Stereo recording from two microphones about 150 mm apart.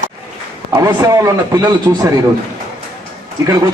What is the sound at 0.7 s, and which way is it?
A man's voice, 25° right (ahead or behind).